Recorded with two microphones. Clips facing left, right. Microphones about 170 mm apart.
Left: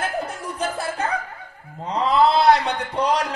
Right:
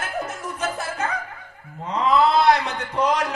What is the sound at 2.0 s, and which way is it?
Speech, 35° left (ahead or behind).